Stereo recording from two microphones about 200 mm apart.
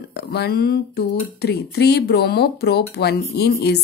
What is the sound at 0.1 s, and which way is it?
Speech, 55° left (ahead or behind).